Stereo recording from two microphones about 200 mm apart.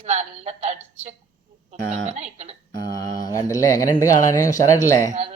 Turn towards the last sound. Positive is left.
turn(degrees=-30)  # may be behind; listen again after turning